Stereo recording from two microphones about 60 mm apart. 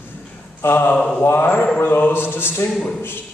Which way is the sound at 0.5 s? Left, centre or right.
Left.